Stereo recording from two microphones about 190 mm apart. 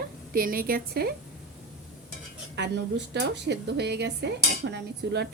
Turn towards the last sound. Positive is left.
turn(degrees=-65)  # may be behind; listen again after turning